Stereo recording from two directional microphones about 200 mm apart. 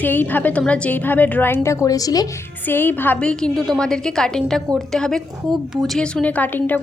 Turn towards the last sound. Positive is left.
turn(degrees=10)  # may be behind; listen again after turning